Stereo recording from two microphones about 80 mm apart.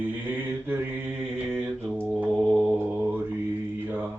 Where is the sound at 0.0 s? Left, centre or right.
Right.